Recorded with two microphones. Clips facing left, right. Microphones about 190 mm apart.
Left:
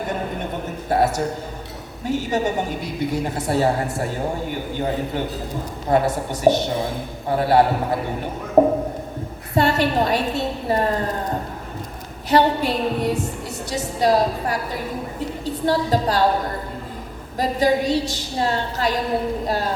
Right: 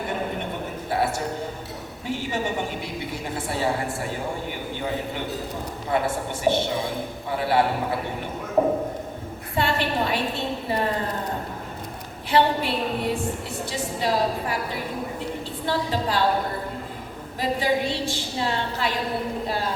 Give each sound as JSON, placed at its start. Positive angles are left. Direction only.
{"t": 0.9, "sound": "a sound", "side_deg": 40}
{"t": 2.0, "sound": "a woman's voice", "side_deg": 40}
{"t": 5.9, "sound": "a woman's voice", "side_deg": 40}
{"t": 12.3, "sound": "a woman's voice", "side_deg": 40}
{"t": 17.3, "sound": "a woman's voice", "side_deg": 40}